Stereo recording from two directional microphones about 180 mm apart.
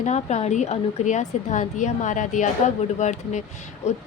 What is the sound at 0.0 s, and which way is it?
A woman's voice, 40° left (ahead or behind).